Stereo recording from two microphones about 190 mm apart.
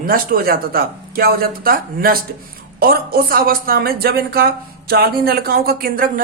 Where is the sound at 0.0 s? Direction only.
50° right (ahead or behind).